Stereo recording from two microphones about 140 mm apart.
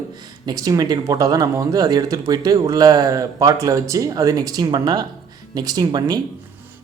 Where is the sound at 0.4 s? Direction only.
25° right (ahead or behind).